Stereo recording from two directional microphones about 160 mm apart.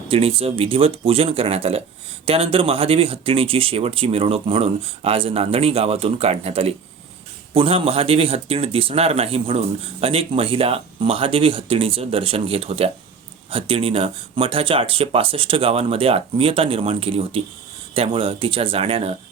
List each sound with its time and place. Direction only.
0.1 s speech: 35° right (ahead or behind)